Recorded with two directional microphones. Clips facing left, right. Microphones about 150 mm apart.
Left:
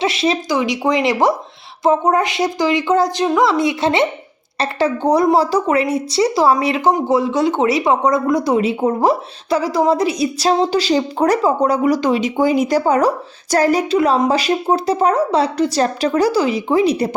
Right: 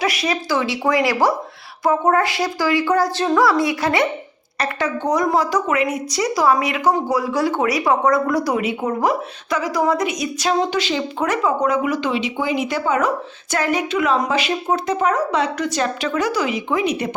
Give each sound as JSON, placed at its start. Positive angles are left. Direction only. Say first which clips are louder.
{"t": 0.0, "sound": "a woman's voice", "louder": "left 4 dB", "side_deg": 25}